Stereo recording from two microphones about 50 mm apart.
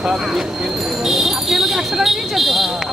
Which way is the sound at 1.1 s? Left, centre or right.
Centre.